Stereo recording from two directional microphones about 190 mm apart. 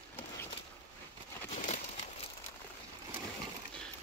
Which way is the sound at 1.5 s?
40° left (ahead or behind).